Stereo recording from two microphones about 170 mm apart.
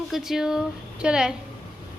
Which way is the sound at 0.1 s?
Centre (ahead or behind).